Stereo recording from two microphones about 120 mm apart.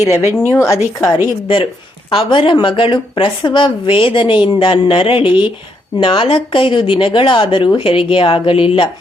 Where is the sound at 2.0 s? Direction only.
45° left (ahead or behind).